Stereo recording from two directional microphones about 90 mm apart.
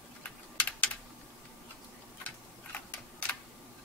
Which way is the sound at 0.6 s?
15° left (ahead or behind).